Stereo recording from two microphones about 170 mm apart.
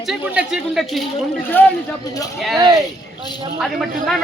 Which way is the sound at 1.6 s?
10° left (ahead or behind).